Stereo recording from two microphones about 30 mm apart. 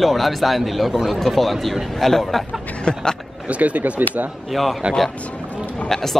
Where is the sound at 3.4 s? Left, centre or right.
Right.